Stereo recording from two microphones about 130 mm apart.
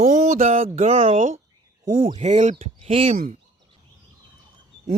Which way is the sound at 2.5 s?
50° right (ahead or behind).